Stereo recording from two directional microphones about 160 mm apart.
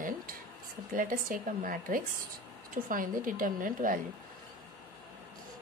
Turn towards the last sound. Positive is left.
turn(degrees=-55)  # may be behind; listen again after turning